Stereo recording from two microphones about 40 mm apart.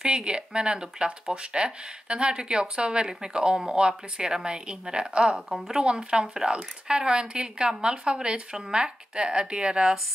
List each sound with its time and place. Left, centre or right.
0.0 s speech: right